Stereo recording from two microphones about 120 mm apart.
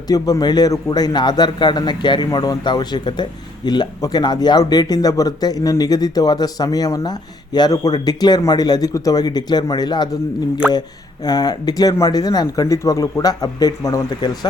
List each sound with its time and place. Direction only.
0.1 s speech: 30° left (ahead or behind)